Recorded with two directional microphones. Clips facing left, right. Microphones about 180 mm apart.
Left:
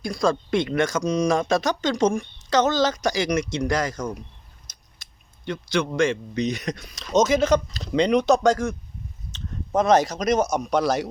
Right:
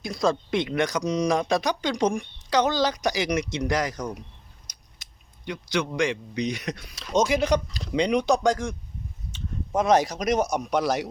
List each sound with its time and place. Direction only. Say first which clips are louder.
0.0 s speech: left 2 dB; 20° right (ahead or behind)
5.5 s a man's voice: left 3 dB; 15° right (ahead or behind)